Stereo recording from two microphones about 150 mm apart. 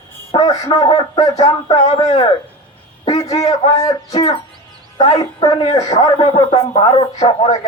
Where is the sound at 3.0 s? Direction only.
35° left (ahead or behind).